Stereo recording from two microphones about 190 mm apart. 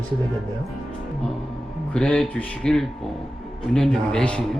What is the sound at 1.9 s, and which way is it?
Speech, 5° left (ahead or behind).